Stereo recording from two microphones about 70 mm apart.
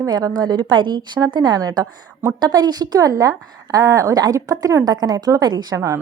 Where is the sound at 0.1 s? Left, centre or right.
Right.